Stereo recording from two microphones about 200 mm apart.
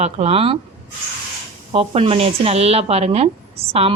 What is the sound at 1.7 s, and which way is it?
Speech, 30° right (ahead or behind).